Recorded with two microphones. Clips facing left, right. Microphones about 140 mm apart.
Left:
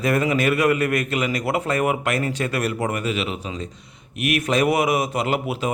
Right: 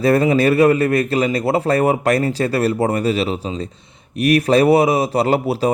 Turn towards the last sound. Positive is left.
turn(degrees=-35)  # may be behind; listen again after turning